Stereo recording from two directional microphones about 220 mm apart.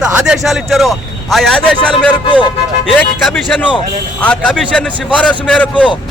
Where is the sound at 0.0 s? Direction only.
5° right (ahead or behind).